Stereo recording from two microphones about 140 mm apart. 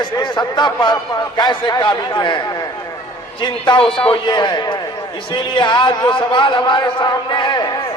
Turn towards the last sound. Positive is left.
turn(degrees=35)  # may be behind; listen again after turning